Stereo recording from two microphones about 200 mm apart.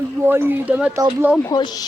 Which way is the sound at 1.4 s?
20° left (ahead or behind).